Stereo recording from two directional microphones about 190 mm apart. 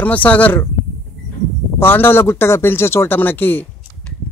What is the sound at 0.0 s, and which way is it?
Speech, 10° left (ahead or behind).